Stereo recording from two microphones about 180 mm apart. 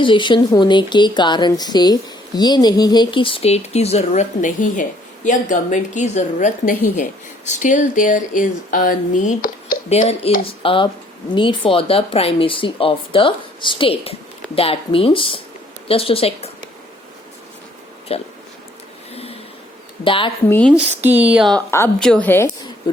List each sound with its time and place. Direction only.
0.0 s speech: 25° left (ahead or behind); by 9.7 s 45° left (ahead or behind)
9.9 s speech: 35° left (ahead or behind)
18.1 s speech: 35° left (ahead or behind)
19.1 s a sound: 35° left (ahead or behind)
20.1 s speech: 30° left (ahead or behind)
20.5 s a woman's voice: 5° left (ahead or behind)
20.7 s speech: 10° right (ahead or behind)
21.7 s a woman's voice: 15° left (ahead or behind)